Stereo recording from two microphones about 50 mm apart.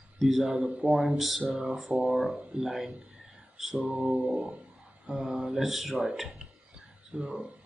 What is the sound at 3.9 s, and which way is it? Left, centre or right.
Mantra, centre.